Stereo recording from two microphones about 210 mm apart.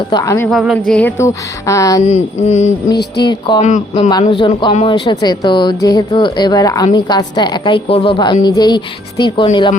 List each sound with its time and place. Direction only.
0.1 s music: 15° left (ahead or behind)
0.4 s music: centre (ahead or behind); by 2.0 s 15° left (ahead or behind)
2.0 s a sound: 30° left (ahead or behind)
3.2 s speech: 20° left (ahead or behind)